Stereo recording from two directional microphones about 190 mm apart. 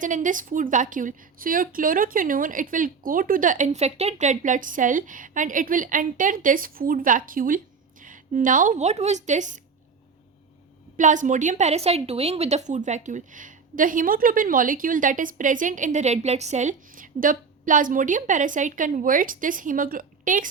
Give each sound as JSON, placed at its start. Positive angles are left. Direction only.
{"t": 0.0, "sound": "a woman's voice", "side_deg": -45}
{"t": 10.9, "sound": "a woman's voice", "side_deg": -40}